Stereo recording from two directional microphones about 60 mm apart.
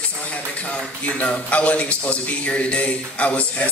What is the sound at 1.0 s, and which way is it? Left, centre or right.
A man's voice, left.